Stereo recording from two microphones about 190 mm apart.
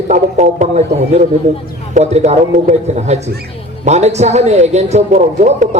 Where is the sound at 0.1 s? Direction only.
40° right (ahead or behind).